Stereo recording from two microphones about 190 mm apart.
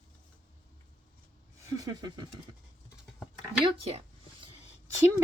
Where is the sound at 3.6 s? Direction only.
30° right (ahead or behind).